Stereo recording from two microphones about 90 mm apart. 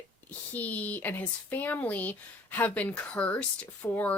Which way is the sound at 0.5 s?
15° left (ahead or behind).